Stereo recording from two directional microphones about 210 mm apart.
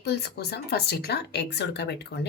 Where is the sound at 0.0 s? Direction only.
50° left (ahead or behind).